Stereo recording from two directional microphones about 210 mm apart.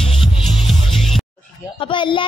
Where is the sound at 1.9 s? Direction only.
25° left (ahead or behind).